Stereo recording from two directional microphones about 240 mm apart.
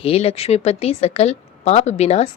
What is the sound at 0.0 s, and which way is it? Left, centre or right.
Speech, left.